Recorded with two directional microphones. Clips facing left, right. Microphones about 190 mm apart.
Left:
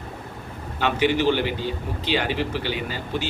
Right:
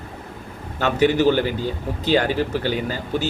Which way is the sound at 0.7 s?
45° right (ahead or behind).